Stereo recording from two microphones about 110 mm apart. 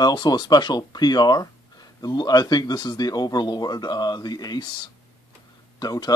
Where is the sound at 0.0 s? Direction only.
40° left (ahead or behind).